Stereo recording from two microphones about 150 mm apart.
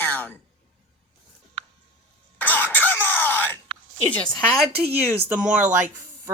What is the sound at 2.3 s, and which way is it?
Throat clearing, 10° left (ahead or behind).